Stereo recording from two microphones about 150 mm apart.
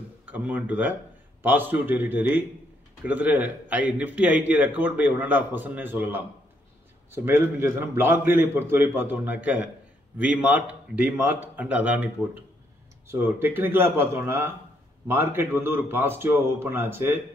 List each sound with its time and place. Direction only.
0.2 s a man's voice: 10° right (ahead or behind)
13.1 s a man's voice: 15° right (ahead or behind)